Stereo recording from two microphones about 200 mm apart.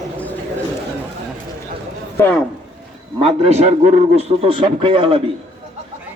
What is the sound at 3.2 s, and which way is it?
A man's voice, 30° right (ahead or behind).